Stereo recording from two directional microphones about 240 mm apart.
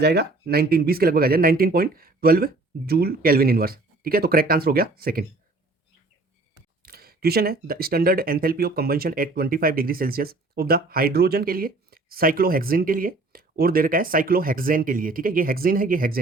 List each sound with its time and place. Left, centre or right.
0.0 s speech: right
6.8 s speech: right